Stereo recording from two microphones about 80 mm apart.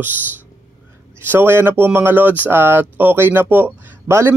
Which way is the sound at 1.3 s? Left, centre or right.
Right.